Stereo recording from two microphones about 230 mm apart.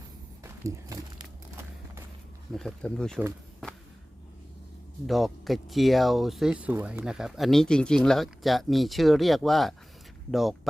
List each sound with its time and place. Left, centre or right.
0.4 s a sound: centre
2.5 s speech: centre
5.0 s speech: centre